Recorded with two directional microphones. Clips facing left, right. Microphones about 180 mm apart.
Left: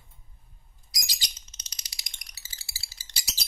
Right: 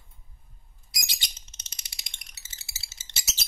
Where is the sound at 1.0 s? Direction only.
25° right (ahead or behind).